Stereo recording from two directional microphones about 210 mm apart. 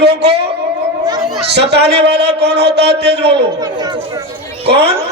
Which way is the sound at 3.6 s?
20° right (ahead or behind).